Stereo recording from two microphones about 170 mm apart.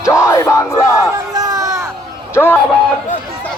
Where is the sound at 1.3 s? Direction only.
20° right (ahead or behind).